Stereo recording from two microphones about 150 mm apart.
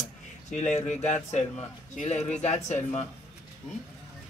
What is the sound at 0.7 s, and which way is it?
Speech, 50° left (ahead or behind).